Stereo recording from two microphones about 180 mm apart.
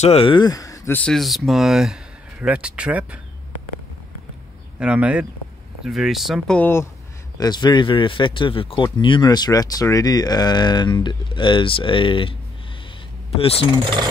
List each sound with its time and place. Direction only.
0.0 s speech: 30° left (ahead or behind); by 3.2 s 5° right (ahead or behind)
4.7 s speech: 5° right (ahead or behind); by 6.9 s 10° left (ahead or behind)
7.3 s speech: 25° left (ahead or behind)